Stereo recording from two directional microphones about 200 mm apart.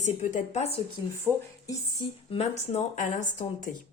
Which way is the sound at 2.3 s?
30° left (ahead or behind).